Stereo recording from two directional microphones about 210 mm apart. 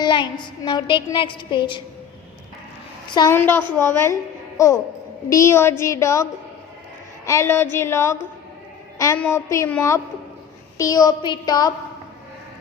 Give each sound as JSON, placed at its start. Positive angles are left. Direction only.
{"t": 0.0, "sound": "a woman's voice", "side_deg": 20}
{"t": 3.2, "sound": "a woman's voice", "side_deg": 10}
{"t": 7.3, "sound": "a woman's voice", "side_deg": 10}